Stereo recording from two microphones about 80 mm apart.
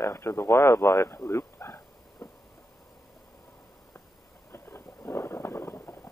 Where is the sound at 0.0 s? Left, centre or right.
Left.